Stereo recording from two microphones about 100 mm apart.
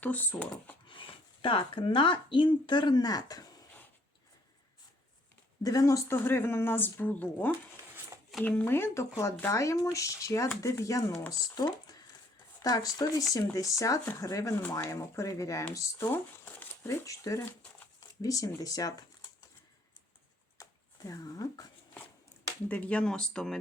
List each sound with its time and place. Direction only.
0.0 s speech: 15° left (ahead or behind)
0.9 s speech: 60° left (ahead or behind); by 3.4 s 40° left (ahead or behind)
5.6 s speech: 35° left (ahead or behind)
14.0 s speech: 20° left (ahead or behind)
14.3 s speech: 35° left (ahead or behind)
20.6 s a sound: 35° left (ahead or behind)
22.7 s speech: 10° left (ahead or behind)